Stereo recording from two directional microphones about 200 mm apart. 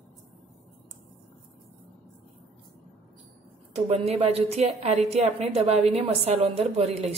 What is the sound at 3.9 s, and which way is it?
A woman's voice, 30° right (ahead or behind).